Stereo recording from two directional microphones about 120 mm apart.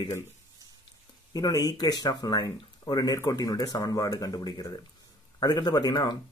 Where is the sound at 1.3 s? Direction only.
30° left (ahead or behind).